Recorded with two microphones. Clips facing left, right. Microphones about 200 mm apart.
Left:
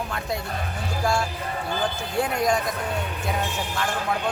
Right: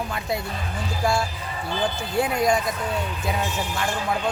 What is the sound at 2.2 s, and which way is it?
Speech, centre (ahead or behind).